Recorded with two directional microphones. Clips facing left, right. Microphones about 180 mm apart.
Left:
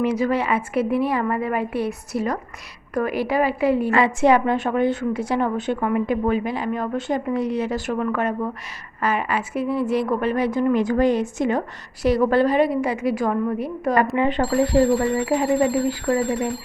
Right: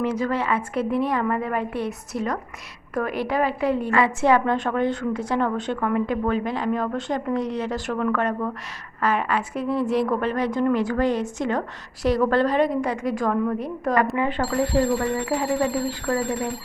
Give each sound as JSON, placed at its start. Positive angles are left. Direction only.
{"t": 0.0, "sound": "speech", "side_deg": 10}
{"t": 3.9, "sound": "a woman's voice", "side_deg": 20}
{"t": 14.2, "sound": "a woman's voice", "side_deg": 20}